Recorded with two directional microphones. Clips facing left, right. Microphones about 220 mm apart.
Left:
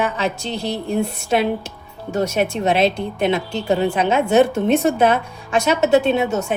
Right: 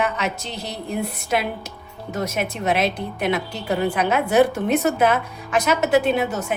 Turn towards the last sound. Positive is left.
turn(degrees=25)  # may be behind; listen again after turning